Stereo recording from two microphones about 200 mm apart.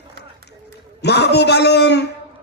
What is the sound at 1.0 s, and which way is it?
A man's voice, 55° left (ahead or behind).